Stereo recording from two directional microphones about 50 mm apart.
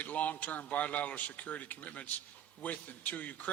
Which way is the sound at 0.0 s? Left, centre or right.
Left.